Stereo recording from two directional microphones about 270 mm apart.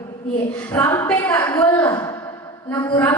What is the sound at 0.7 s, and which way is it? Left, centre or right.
A woman's voice, centre.